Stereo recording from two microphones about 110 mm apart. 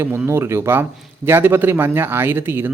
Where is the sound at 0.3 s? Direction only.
25° right (ahead or behind).